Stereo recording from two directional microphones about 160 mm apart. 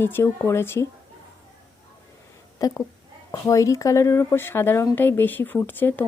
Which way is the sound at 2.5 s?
20° left (ahead or behind).